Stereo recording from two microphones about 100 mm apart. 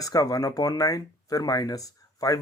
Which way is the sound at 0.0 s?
35° left (ahead or behind).